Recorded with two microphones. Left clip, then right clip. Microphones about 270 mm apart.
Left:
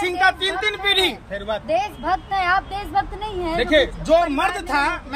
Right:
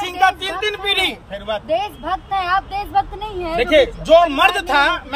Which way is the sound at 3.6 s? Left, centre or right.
Centre.